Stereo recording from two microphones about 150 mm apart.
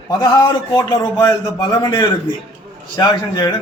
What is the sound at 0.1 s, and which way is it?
A man's voice, 30° left (ahead or behind).